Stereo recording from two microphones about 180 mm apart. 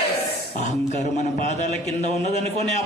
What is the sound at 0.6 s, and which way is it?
A man's voice, 40° left (ahead or behind).